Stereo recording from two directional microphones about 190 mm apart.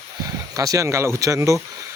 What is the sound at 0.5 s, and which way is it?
Speech, 15° right (ahead or behind).